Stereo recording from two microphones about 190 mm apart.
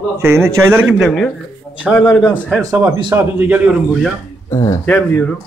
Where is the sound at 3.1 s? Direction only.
10° right (ahead or behind).